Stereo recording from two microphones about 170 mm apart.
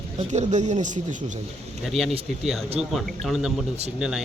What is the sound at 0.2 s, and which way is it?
Speech, 40° right (ahead or behind).